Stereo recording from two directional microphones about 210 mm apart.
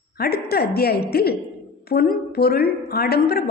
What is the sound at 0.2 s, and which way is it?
A woman's voice, 45° left (ahead or behind).